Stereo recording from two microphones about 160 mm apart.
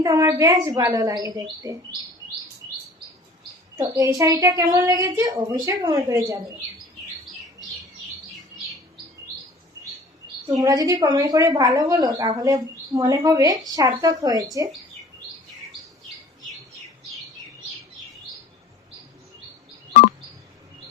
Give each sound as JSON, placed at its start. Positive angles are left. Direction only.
{"t": 0.0, "sound": "a woman's voice", "side_deg": -20}
{"t": 3.7, "sound": "a woman's voice", "side_deg": -20}
{"t": 10.6, "sound": "a woman's voice", "side_deg": -25}